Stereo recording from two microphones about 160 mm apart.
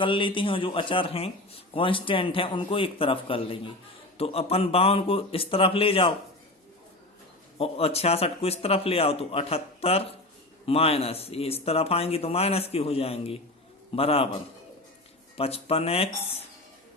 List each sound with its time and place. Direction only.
0.0 s speech: 30° left (ahead or behind)
7.6 s speech: 40° left (ahead or behind)
15.4 s speech: 40° left (ahead or behind)